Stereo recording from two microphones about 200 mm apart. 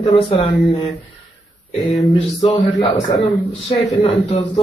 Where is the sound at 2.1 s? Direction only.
25° left (ahead or behind).